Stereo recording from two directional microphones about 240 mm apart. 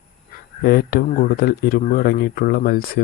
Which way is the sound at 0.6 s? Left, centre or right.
Left.